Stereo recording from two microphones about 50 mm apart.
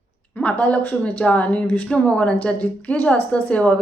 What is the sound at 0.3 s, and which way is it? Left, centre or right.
A woman's voice, left.